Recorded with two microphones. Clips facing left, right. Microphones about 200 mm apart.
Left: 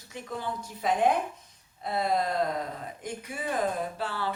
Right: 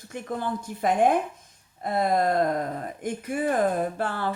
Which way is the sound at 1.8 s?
50° right (ahead or behind).